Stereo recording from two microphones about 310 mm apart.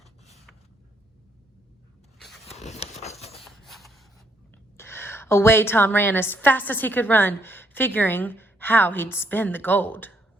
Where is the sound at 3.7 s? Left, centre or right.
Centre.